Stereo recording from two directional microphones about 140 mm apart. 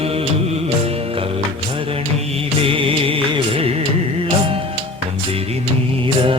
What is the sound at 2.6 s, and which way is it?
Music of bollywood, 40° right (ahead or behind).